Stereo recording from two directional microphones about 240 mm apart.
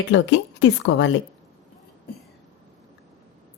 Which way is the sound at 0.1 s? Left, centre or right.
Left.